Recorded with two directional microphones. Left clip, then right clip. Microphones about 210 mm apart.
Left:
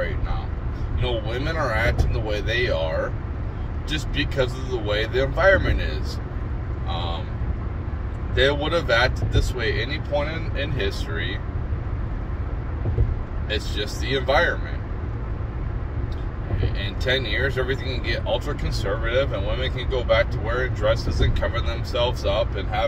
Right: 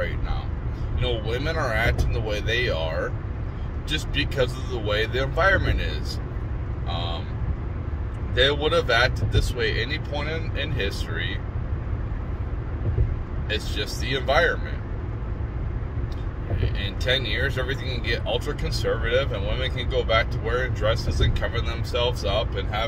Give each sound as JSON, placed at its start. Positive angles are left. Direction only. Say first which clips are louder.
{"t": 1.0, "sound": "speech", "louder": "even", "side_deg": -10}
{"t": 3.9, "sound": "speech", "louder": "even", "side_deg": -10}
{"t": 8.4, "sound": "speech", "louder": "even", "side_deg": -10}
{"t": 13.5, "sound": "speech", "louder": "left 1 dB", "side_deg": -10}
{"t": 16.6, "sound": "speech", "louder": "left 1 dB", "side_deg": -10}